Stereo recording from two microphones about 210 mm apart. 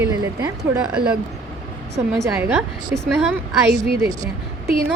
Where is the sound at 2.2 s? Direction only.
5° right (ahead or behind).